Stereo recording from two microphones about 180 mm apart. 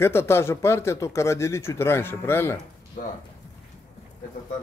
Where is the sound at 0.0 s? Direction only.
15° left (ahead or behind).